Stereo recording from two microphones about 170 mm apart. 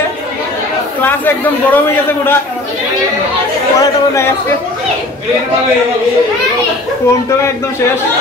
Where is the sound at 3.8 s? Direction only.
20° left (ahead or behind).